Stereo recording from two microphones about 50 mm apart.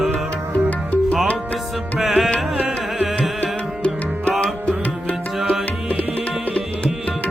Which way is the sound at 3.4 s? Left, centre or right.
Left.